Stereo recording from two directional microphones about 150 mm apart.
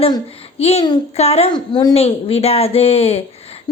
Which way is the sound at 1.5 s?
30° left (ahead or behind).